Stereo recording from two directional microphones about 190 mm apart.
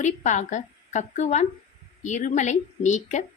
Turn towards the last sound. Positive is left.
turn(degrees=40)  # may be behind; listen again after turning